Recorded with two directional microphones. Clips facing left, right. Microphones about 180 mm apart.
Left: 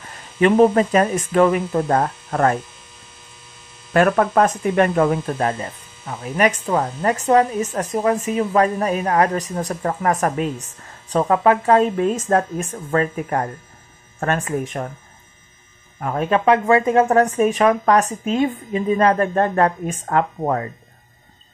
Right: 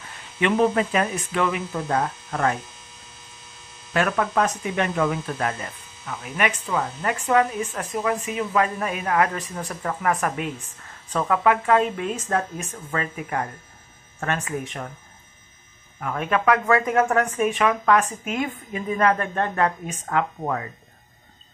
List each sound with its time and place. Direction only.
0.0 s speech: 40° left (ahead or behind)
3.9 s speech: 45° left (ahead or behind)
16.0 s speech: 35° left (ahead or behind)